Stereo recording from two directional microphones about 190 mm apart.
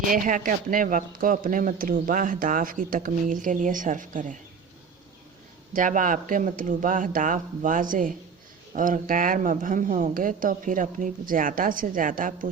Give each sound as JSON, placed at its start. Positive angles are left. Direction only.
{"t": 0.1, "sound": "speech", "side_deg": -45}
{"t": 5.7, "sound": "speech", "side_deg": -45}